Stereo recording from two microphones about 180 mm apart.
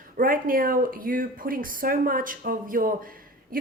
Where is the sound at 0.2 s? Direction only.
50° right (ahead or behind).